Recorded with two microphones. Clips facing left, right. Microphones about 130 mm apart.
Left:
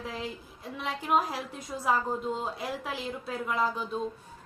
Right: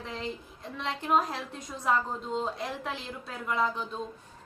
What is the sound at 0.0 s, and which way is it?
A woman's voice, 5° left (ahead or behind).